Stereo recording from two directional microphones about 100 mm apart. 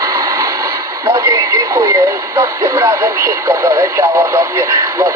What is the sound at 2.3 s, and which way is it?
Speech, 30° right (ahead or behind).